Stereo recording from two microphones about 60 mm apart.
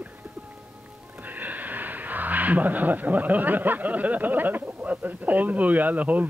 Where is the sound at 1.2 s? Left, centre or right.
Right.